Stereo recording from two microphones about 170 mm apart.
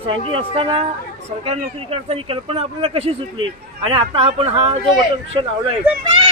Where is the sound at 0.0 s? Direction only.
30° right (ahead or behind).